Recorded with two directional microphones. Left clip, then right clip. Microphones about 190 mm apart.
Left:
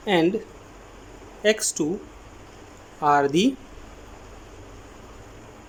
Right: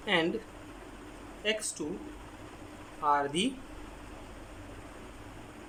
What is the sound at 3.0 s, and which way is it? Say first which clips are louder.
Speech: left 9 dB; 35° left (ahead or behind).